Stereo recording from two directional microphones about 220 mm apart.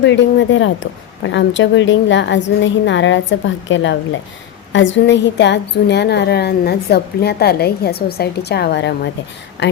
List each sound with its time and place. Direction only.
0.0 s a woman's voice: 55° left (ahead or behind)